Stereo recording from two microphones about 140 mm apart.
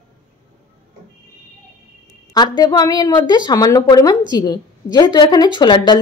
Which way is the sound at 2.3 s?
30° left (ahead or behind).